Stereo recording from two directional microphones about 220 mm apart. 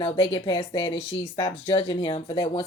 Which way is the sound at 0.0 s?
20° left (ahead or behind).